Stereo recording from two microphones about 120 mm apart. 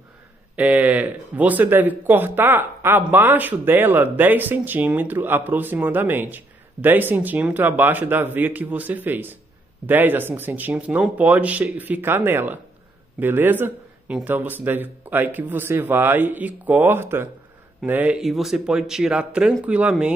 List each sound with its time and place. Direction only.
0.6 s speech: 10° right (ahead or behind)
18.2 s speech: centre (ahead or behind)